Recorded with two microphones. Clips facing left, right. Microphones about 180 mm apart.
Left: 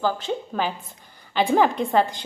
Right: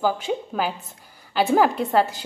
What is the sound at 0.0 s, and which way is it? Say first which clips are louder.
A woman's voice: right 1 dB; 10° right (ahead or behind).